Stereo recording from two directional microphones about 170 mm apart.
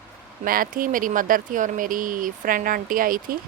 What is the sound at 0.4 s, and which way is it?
Speech, 55° right (ahead or behind).